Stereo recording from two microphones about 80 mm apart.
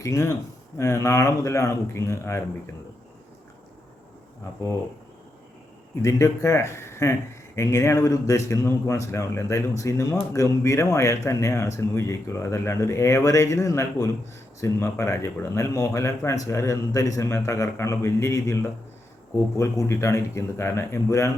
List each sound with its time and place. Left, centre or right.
0.0 s speech: left
6.0 s speech: left